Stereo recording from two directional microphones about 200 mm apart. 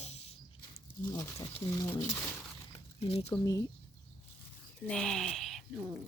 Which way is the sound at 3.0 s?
30° left (ahead or behind).